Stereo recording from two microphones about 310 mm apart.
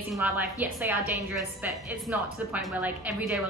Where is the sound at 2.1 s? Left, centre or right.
Centre.